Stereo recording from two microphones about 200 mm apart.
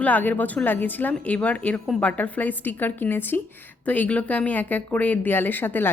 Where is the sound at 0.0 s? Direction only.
10° left (ahead or behind).